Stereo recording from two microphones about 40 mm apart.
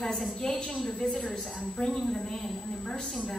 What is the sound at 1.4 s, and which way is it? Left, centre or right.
A woman's voice, centre.